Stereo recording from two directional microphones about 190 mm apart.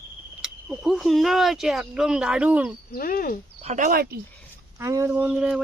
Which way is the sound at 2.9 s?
50° left (ahead or behind).